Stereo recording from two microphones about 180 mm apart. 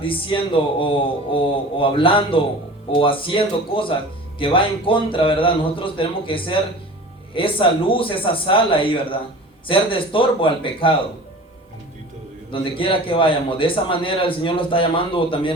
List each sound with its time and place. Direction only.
0.0 s a man's voice: 30° left (ahead or behind)
12.5 s a man's voice: 30° left (ahead or behind)